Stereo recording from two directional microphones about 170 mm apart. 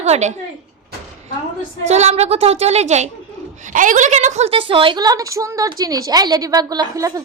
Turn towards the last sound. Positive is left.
turn(degrees=-20)  # may be behind; listen again after turning